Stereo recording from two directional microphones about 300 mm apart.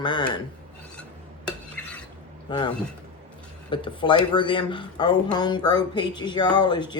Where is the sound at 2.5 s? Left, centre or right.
Centre.